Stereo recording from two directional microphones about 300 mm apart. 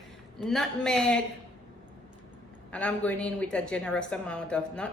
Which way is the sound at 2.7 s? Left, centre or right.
Centre.